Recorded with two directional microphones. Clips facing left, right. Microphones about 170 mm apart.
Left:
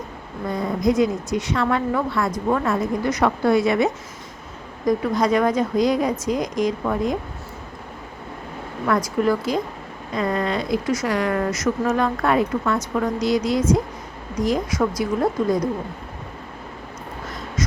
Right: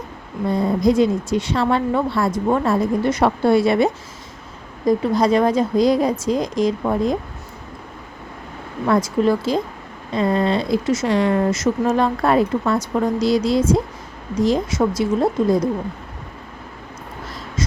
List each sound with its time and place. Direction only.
0.5 s a woman's voice: 30° right (ahead or behind)
8.9 s speech: 25° right (ahead or behind)
17.6 s a sound: 30° right (ahead or behind)